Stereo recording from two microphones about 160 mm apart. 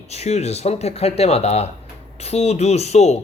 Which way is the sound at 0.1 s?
45° left (ahead or behind).